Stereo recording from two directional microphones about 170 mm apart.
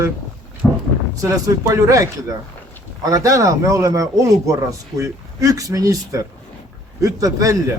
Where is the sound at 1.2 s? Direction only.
20° right (ahead or behind).